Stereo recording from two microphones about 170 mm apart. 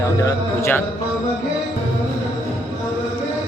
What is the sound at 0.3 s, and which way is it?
Speech, 15° left (ahead or behind).